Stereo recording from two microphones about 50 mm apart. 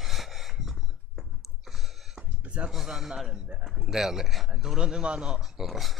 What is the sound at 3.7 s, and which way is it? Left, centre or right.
Speech, centre.